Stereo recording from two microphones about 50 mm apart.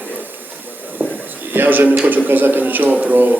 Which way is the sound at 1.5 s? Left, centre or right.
Right.